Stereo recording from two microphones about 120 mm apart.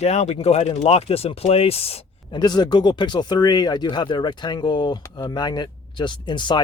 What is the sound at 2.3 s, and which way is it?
A man's voice, 35° left (ahead or behind).